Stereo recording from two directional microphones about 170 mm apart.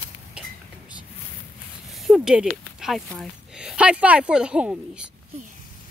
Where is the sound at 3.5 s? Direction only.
5° right (ahead or behind).